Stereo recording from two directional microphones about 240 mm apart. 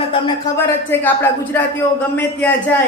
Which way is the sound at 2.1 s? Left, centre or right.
Centre.